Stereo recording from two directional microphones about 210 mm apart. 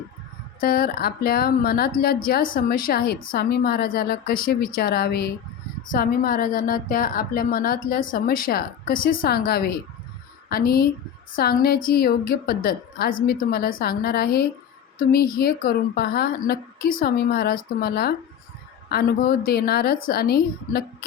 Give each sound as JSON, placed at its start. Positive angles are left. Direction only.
{"t": 0.6, "sound": "a woman's voice", "side_deg": 45}